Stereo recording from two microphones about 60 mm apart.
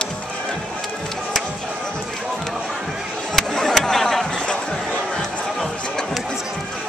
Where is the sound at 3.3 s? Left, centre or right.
Centre.